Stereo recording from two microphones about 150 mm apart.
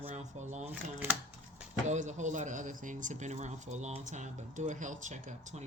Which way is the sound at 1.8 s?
50° right (ahead or behind).